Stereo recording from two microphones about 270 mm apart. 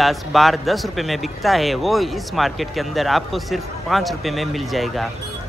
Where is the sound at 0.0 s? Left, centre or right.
Centre.